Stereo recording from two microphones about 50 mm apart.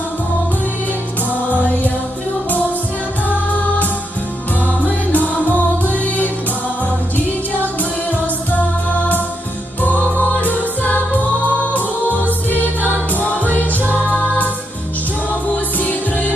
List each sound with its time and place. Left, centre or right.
1.5 s music: left
3.2 s music: left
5.1 s music: left
7.2 s music: left
9.8 s music: left
15.8 s music: left